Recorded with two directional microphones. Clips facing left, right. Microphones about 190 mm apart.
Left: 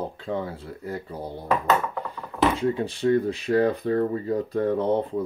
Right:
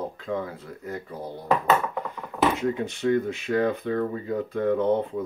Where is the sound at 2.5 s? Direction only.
30° left (ahead or behind).